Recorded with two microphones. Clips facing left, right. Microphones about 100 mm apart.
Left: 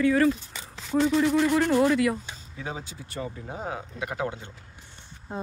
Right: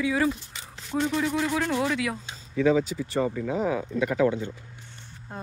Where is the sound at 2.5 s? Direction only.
90° right.